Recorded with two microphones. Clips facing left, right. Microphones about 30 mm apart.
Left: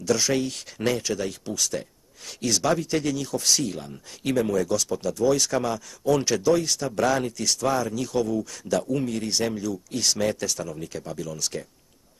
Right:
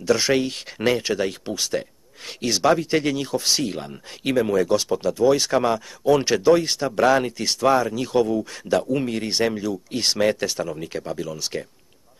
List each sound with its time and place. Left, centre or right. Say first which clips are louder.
0.0 s speech: right 4 dB; right